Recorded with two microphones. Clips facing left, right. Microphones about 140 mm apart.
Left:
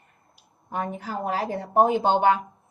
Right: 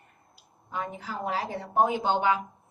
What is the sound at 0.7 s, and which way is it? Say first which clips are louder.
A woman's voice: left 4 dB; 50° left (ahead or behind).